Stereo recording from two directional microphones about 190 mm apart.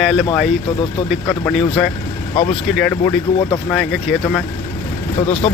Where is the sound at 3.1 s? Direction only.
10° left (ahead or behind).